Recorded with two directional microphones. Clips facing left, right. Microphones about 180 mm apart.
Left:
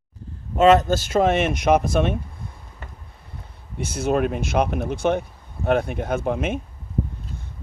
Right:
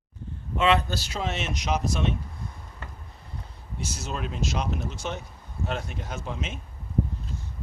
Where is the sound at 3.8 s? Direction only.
55° left (ahead or behind).